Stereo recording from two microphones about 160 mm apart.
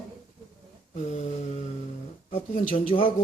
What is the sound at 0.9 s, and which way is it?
Mantra, 50° left (ahead or behind).